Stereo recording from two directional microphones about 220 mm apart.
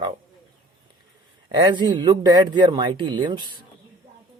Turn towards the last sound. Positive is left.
turn(degrees=-20)  # may be behind; listen again after turning